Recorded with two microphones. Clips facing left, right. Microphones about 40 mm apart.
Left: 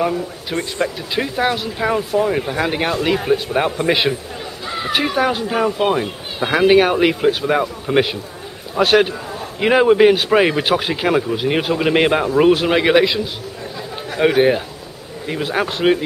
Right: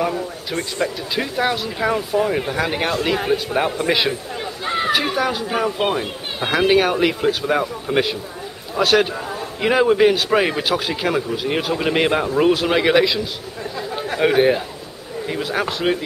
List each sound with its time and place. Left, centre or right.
0.5 s speech: centre
4.6 s chatter: right
5.0 s speech: centre